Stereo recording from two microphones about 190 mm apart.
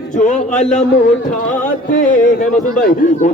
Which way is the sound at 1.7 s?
45° left (ahead or behind).